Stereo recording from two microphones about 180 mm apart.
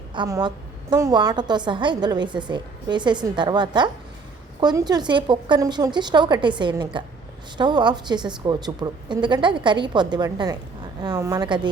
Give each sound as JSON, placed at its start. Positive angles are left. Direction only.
{"t": 0.1, "sound": "a woman's voice", "side_deg": -20}